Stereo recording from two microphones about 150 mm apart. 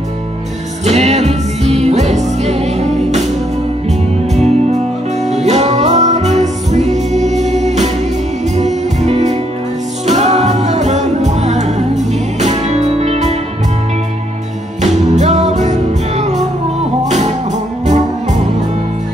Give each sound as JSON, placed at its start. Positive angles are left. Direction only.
{"t": 0.8, "sound": "music", "side_deg": -45}
{"t": 4.3, "sound": "music", "side_deg": -50}
{"t": 14.8, "sound": "music", "side_deg": -50}